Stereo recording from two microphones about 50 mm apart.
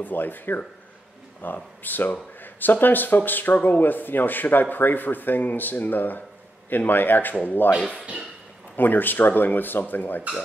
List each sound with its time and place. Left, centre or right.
0.0 s speech: left
8.7 s speech: left